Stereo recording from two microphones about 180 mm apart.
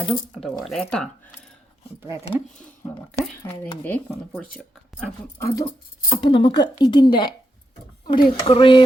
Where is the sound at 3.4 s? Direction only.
15° left (ahead or behind).